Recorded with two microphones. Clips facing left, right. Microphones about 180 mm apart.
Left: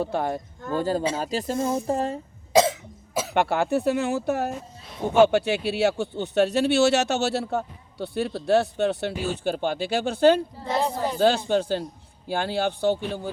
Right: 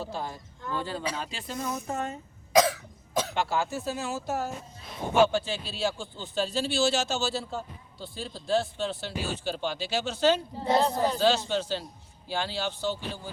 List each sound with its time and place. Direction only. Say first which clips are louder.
0.0 s a man's voice: left 9 dB; 60° left (ahead or behind); by 1.6 s 40° left (ahead or behind)
1.6 s speech: left 4 dB; 30° left (ahead or behind)
3.3 s speech: left 11 dB; 60° left (ahead or behind)
10.8 s speech: even; 10° left (ahead or behind)
11.2 s a man's voice: left 9 dB; 55° left (ahead or behind)